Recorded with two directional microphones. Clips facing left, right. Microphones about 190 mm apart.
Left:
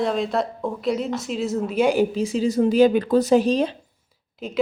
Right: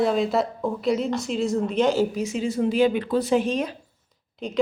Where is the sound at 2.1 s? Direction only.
30° left (ahead or behind).